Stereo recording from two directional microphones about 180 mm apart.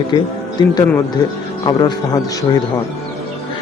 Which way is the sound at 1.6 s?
25° left (ahead or behind).